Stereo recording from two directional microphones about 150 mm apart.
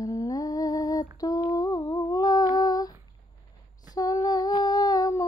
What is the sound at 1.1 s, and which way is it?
Humming, 25° left (ahead or behind).